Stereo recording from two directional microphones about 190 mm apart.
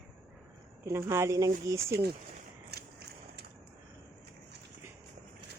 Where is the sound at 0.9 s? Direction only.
15° right (ahead or behind).